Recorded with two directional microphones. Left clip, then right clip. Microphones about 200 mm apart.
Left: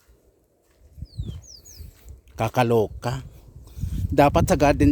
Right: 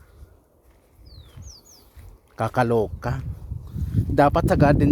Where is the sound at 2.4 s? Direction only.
10° left (ahead or behind).